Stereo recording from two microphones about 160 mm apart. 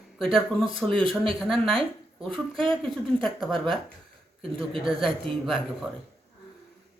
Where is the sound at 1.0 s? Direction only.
35° right (ahead or behind).